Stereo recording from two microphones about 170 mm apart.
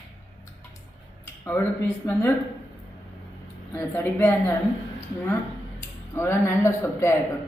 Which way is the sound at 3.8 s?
15° left (ahead or behind).